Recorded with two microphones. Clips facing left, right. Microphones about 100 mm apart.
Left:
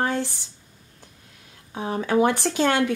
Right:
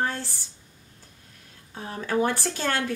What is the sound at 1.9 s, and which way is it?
Speech, 15° left (ahead or behind).